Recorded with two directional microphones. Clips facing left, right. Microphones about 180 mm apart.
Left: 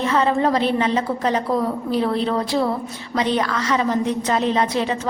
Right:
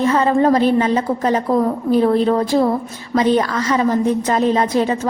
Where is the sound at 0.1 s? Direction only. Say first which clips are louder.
Right 2 dB; 45° right (ahead or behind).